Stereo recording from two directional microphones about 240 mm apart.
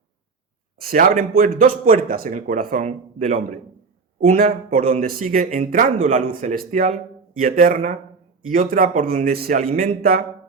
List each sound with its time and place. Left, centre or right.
0.8 s speech: right